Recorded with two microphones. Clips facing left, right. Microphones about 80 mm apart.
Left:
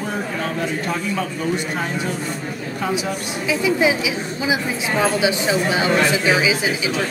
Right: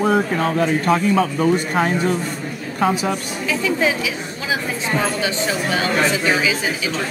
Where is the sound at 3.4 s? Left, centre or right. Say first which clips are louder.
Left 2 dB; centre.